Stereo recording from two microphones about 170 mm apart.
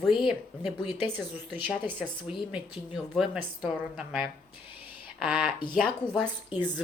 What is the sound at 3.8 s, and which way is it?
Speech, centre (ahead or behind).